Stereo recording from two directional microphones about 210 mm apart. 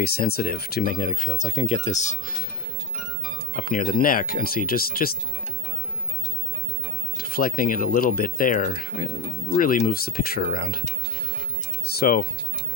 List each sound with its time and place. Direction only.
0.0 s speech: 45° left (ahead or behind)
3.5 s speech: 40° left (ahead or behind)
7.2 s speech: 45° left (ahead or behind)
11.9 s mechanisms: 45° left (ahead or behind)